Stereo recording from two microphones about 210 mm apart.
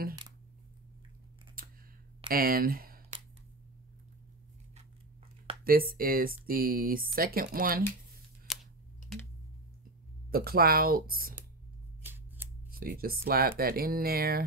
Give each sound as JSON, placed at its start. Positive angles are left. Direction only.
{"t": 1.6, "sound": "a sound", "side_deg": -40}
{"t": 5.6, "sound": "speech", "side_deg": -45}
{"t": 8.5, "sound": "computer keyboard", "side_deg": 0}
{"t": 10.3, "sound": "speech", "side_deg": -45}
{"t": 12.0, "sound": "scissors", "side_deg": -10}
{"t": 12.7, "sound": "speech", "side_deg": -45}